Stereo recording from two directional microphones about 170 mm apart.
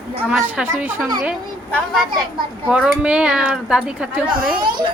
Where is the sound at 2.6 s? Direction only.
5° right (ahead or behind).